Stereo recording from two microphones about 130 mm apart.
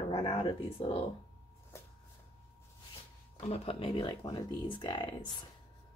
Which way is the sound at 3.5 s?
45° left (ahead or behind).